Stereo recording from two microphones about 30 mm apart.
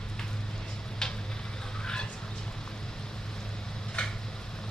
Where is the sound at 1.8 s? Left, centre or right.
Left.